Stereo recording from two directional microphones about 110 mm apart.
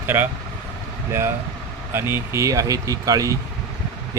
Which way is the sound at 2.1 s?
25° right (ahead or behind).